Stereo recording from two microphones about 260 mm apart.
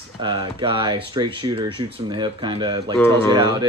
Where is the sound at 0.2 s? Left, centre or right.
Centre.